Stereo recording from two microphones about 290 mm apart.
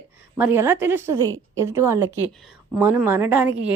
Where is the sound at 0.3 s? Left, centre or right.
Centre.